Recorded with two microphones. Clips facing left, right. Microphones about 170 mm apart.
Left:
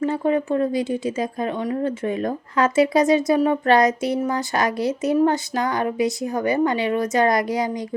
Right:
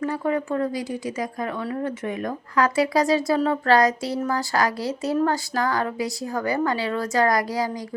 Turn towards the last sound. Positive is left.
turn(degrees=20)  # may be behind; listen again after turning